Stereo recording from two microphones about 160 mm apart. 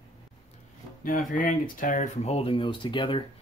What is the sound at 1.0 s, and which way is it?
Speech, 60° left (ahead or behind).